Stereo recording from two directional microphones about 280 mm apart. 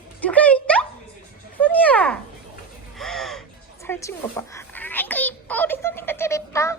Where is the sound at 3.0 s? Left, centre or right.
Centre.